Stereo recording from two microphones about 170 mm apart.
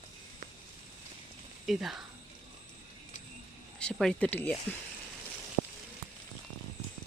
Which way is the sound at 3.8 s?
5° left (ahead or behind).